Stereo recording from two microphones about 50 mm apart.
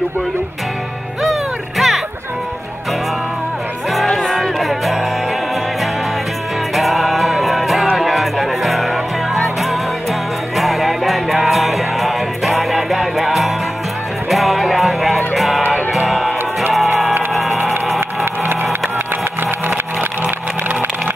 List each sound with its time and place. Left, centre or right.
1.2 s music: centre
4.1 s music: centre
4.4 s music: centre
6.7 s music: centre
17.3 s a sound: centre
18.2 s wood: right